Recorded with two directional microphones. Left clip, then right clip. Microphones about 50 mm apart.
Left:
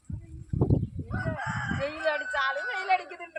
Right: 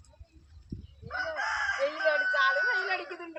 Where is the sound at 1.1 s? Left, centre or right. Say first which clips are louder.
Right 3 dB; left.